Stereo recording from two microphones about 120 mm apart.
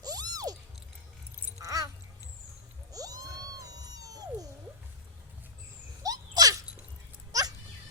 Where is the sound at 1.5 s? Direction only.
30° right (ahead or behind).